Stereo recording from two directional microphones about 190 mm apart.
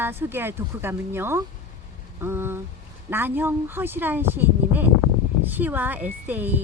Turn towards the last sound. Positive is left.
turn(degrees=-10)  # may be behind; listen again after turning